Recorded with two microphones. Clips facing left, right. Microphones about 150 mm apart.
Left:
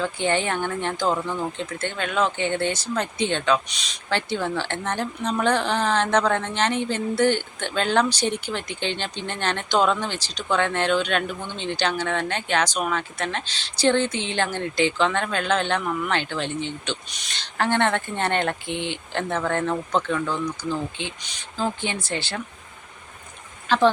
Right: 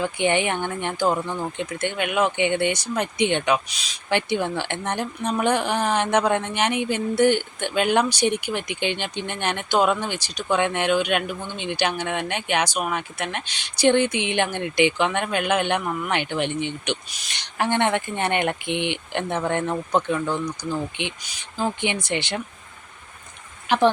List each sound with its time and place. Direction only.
0.0 s speech: 15° right (ahead or behind)
3.7 s speech: centre (ahead or behind)
4.1 s speech: 15° right (ahead or behind)
23.6 s speech: 15° right (ahead or behind)